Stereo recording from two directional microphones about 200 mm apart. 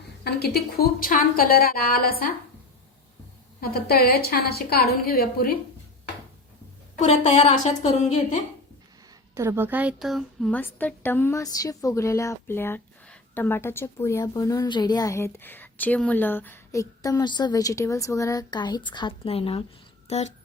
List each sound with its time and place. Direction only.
0.3 s a woman's voice: 50° left (ahead or behind)
3.6 s a woman's voice: 50° left (ahead or behind)
6.9 s a woman's voice: 30° left (ahead or behind)
9.3 s a woman's voice: 15° right (ahead or behind); by 20.3 s 35° left (ahead or behind)